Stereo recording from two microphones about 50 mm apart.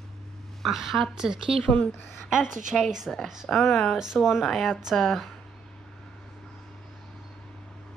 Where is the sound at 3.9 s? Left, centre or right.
Centre.